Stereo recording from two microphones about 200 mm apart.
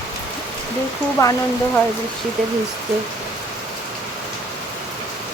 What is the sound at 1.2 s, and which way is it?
Speech, 15° left (ahead or behind).